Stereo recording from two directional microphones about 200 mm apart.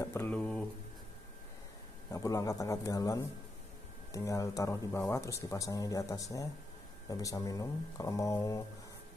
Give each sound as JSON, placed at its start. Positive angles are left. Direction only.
{"t": 0.0, "sound": "mantra", "side_deg": 10}
{"t": 2.0, "sound": "speech", "side_deg": 15}